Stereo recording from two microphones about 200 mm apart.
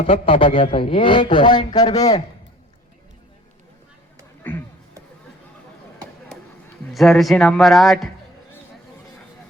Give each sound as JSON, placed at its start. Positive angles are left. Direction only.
{"t": 0.0, "sound": "a man's voice", "side_deg": 30}
{"t": 4.4, "sound": "speech", "side_deg": 10}
{"t": 6.9, "sound": "speech", "side_deg": 0}